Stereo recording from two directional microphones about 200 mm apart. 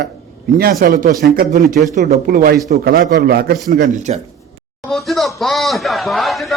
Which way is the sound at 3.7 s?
40° right (ahead or behind).